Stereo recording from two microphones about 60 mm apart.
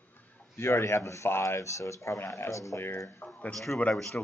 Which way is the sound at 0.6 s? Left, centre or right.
Left.